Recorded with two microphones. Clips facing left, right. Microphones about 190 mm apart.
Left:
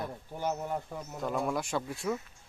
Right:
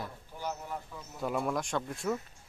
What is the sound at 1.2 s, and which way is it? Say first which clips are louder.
Speech: even; 5° right (ahead or behind).